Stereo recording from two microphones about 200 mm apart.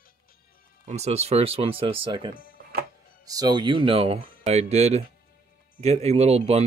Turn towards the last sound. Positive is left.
turn(degrees=-30)  # may be behind; listen again after turning